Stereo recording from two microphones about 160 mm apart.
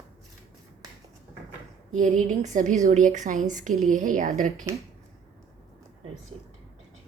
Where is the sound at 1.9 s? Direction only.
50° right (ahead or behind).